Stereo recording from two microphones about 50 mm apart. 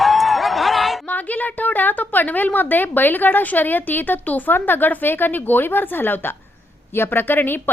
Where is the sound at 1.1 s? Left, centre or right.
Left.